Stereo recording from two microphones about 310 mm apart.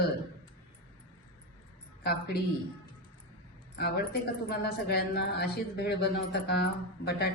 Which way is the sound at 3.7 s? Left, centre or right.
Left.